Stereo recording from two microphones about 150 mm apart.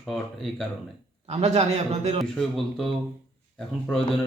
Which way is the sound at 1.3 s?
45° right (ahead or behind).